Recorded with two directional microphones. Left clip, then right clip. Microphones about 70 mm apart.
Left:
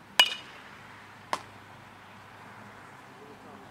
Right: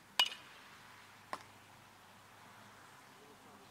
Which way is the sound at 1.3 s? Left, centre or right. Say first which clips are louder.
Left 13 dB; left.